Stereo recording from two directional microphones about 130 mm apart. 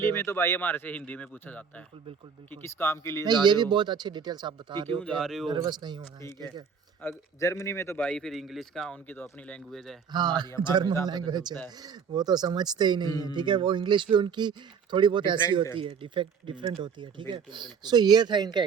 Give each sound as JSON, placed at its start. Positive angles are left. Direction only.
{"t": 0.0, "sound": "a man's voice", "side_deg": 20}
{"t": 3.2, "sound": "speech", "side_deg": -35}
{"t": 5.1, "sound": "speech", "side_deg": 0}
{"t": 5.5, "sound": "speech", "side_deg": -35}
{"t": 7.0, "sound": "a man's voice", "side_deg": 20}
{"t": 8.0, "sound": "speech", "side_deg": 5}
{"t": 10.1, "sound": "speech", "side_deg": -35}